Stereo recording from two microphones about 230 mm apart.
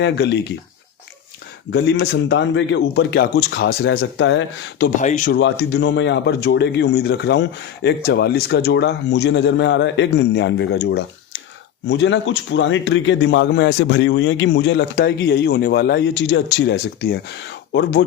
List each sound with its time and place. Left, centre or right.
0.0 s speech: left
1.7 s speech: left
4.9 s speech: left
5.3 s speech: left